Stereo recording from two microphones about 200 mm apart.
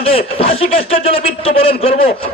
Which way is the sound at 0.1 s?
30° left (ahead or behind).